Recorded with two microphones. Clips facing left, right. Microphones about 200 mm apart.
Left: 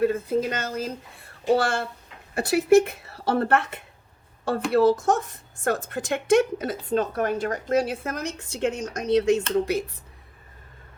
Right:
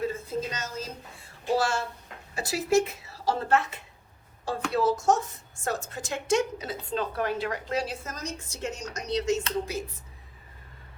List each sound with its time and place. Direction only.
0.0 s a woman's voice: 60° left (ahead or behind)